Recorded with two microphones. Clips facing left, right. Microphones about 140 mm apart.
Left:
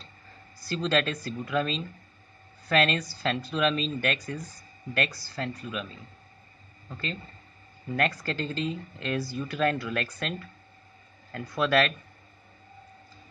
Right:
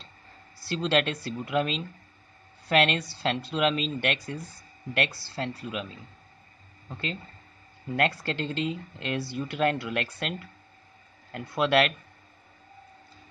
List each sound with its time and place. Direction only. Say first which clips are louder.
0.6 s speech: right 1 dB; 25° right (ahead or behind)
6.9 s speech: right 1 dB; 20° right (ahead or behind)
11.3 s speech: right 1 dB; 20° right (ahead or behind)